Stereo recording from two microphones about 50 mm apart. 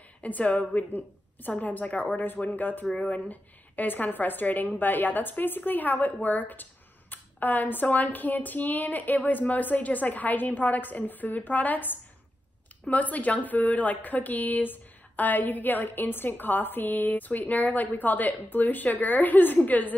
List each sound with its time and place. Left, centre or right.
0.2 s a woman's voice: left